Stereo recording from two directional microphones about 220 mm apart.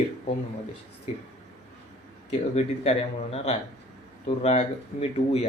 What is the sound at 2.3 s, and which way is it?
Speech, 30° left (ahead or behind).